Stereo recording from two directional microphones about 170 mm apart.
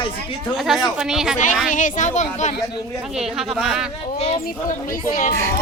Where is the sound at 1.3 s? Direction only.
50° left (ahead or behind).